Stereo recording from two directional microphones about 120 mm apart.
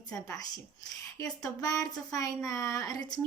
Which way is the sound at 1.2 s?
30° left (ahead or behind).